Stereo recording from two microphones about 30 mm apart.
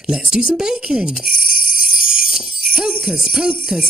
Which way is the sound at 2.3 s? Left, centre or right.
Right.